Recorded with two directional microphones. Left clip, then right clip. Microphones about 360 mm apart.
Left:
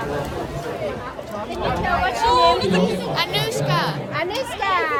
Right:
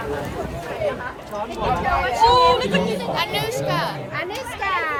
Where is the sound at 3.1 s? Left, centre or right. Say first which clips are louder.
Left 1 dB; centre.